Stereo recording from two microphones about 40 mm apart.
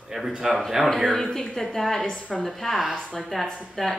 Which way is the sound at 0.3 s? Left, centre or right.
Right.